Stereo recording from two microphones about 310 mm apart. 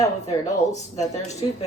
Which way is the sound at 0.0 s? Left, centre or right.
Centre.